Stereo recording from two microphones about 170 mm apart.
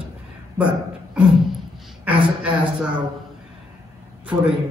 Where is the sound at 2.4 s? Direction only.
10° right (ahead or behind).